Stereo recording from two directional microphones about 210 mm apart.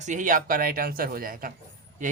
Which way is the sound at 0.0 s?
35° right (ahead or behind).